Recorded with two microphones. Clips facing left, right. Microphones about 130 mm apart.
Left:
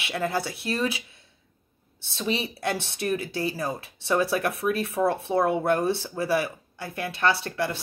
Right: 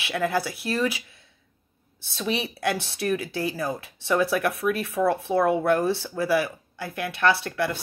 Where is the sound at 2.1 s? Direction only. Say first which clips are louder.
Even; 25° left (ahead or behind).